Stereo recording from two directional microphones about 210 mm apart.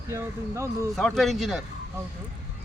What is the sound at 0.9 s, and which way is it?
Speech, centre (ahead or behind).